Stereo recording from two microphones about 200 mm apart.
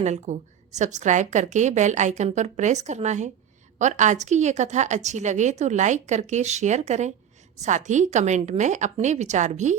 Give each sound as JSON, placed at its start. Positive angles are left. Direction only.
{"t": 0.0, "sound": "a woman's voice", "side_deg": -35}